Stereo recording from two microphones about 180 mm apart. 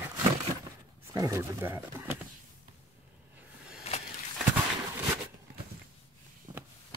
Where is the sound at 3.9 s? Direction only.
35° left (ahead or behind).